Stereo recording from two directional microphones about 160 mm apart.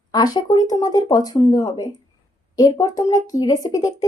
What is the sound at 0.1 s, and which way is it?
A woman's voice, 25° left (ahead or behind).